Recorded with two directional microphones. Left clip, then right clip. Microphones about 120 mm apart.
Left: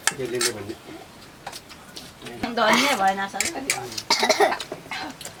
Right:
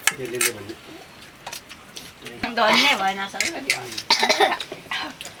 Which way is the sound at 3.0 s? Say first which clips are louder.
Left 2 dB; 10° right (ahead or behind).